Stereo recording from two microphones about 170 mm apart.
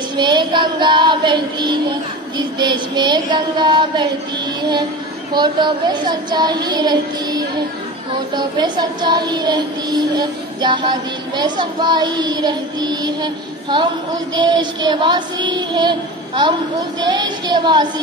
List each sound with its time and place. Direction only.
0.1 s child singing: 25° right (ahead or behind)